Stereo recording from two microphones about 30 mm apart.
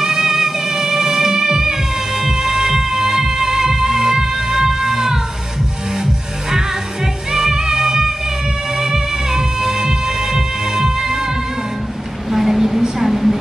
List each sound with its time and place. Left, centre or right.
0.0 s music: centre
7.5 s music: centre
12.3 s a sound: centre